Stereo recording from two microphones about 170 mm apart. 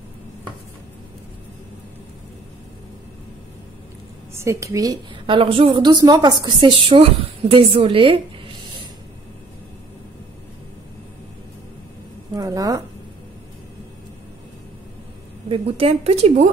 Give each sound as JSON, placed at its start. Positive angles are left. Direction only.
{"t": 4.4, "sound": "a woman's voice", "side_deg": -15}
{"t": 12.4, "sound": "speech", "side_deg": -20}
{"t": 15.4, "sound": "a woman's voice", "side_deg": -35}